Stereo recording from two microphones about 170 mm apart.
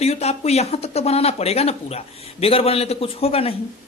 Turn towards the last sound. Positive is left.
turn(degrees=35)  # may be behind; listen again after turning